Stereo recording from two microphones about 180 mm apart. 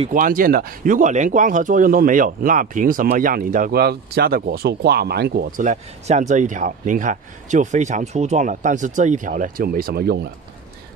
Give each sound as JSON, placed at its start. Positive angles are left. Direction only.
{"t": 0.0, "sound": "speech", "side_deg": -50}
{"t": 5.6, "sound": "speech", "side_deg": -40}